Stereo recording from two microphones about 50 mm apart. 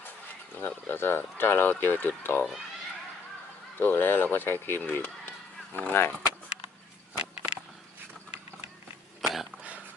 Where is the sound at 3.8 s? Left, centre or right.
Left.